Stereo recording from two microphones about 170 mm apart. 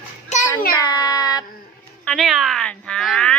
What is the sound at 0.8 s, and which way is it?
Speech, 25° left (ahead or behind).